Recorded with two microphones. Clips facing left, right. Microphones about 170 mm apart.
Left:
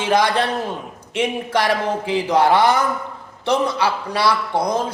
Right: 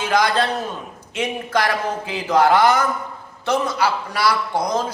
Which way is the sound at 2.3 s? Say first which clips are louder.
Right 1 dB; 25° left (ahead or behind).